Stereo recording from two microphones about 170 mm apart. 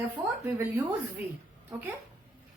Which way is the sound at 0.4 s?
15° right (ahead or behind).